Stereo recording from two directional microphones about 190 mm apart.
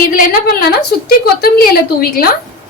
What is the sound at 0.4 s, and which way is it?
A woman's voice, 55° left (ahead or behind).